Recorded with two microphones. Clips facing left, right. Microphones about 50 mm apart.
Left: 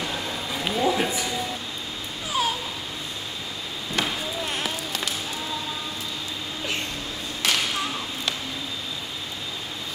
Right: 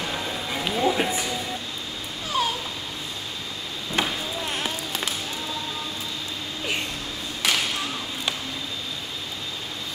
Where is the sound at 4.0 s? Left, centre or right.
Right.